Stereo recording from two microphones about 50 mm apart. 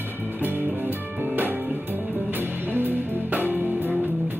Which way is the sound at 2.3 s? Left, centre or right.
Right.